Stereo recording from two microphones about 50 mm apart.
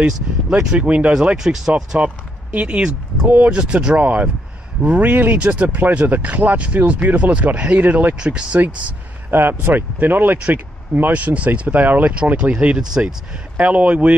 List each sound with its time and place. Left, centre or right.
0.0 s speech: centre
0.7 s speech: right
1.3 s speech: centre
2.0 s speech: right
3.5 s speech: centre
5.8 s speech: right
8.2 s speech: centre
9.3 s speech: right
12.1 s speech: right